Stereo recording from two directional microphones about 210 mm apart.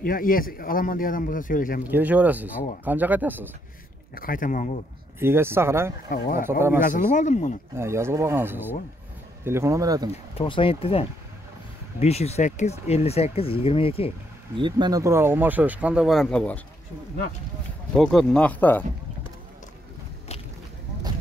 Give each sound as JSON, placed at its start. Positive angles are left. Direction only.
{"t": 0.0, "sound": "a man's voice", "side_deg": 40}
{"t": 1.9, "sound": "speech", "side_deg": -10}
{"t": 4.1, "sound": "a man's voice", "side_deg": 40}
{"t": 5.2, "sound": "speech", "side_deg": -10}
{"t": 6.0, "sound": "a man's voice", "side_deg": 45}
{"t": 7.7, "sound": "speech", "side_deg": -10}
{"t": 10.1, "sound": "speech", "side_deg": 25}
{"t": 14.6, "sound": "speech", "side_deg": -20}
{"t": 17.9, "sound": "speech", "side_deg": 0}